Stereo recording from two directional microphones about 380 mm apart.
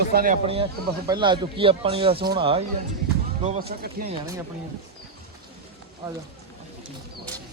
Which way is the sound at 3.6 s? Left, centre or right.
Centre.